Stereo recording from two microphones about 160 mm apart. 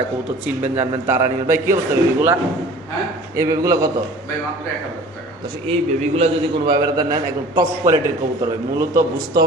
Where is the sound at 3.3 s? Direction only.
20° right (ahead or behind).